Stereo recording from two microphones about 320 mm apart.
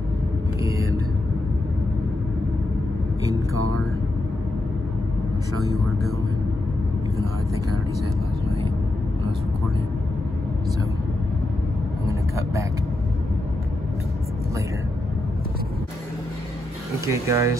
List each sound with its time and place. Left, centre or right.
0.7 s vehicle: centre
3.5 s vehicle: right
12.1 s speech: centre
17.0 s speech: centre